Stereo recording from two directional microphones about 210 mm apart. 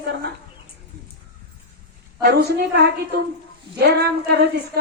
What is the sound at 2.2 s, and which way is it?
A woman's voice, 50° right (ahead or behind).